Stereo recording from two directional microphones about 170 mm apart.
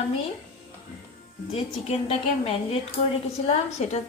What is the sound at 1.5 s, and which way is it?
A woman's voice, 35° left (ahead or behind).